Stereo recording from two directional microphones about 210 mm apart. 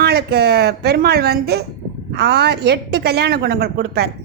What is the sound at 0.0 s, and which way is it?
A woman's voice, 50° right (ahead or behind).